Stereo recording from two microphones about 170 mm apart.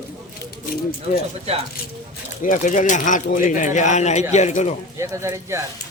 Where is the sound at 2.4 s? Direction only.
50° left (ahead or behind).